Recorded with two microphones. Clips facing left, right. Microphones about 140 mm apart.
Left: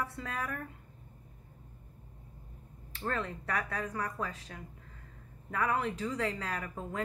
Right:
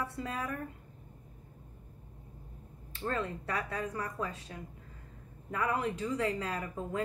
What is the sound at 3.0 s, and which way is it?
Speech, 30° right (ahead or behind).